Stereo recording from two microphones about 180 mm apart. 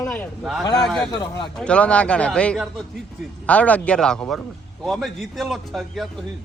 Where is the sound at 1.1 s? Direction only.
25° left (ahead or behind).